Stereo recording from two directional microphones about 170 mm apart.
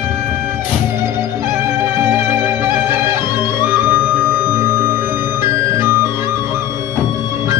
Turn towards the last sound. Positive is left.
turn(degrees=-15)  # may be behind; listen again after turning